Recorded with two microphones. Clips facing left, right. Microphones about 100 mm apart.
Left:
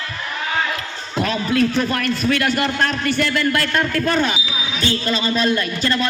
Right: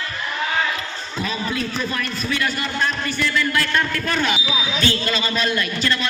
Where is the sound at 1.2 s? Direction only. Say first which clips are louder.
Left 7 dB; 60° left (ahead or behind).